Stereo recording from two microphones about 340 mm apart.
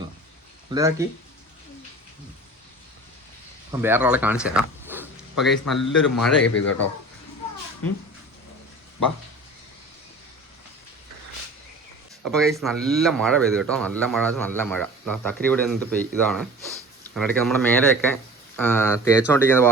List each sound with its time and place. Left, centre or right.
0.7 s speech: centre
3.7 s speech: centre
12.2 s speech: centre